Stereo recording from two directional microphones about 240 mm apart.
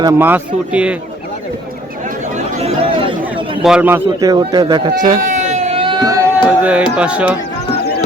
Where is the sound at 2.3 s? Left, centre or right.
Right.